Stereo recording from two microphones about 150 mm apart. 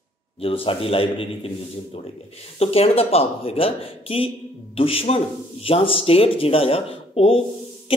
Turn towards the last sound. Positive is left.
turn(degrees=40)  # may be behind; listen again after turning